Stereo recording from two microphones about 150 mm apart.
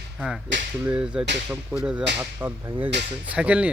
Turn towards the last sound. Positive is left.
turn(degrees=-10)  # may be behind; listen again after turning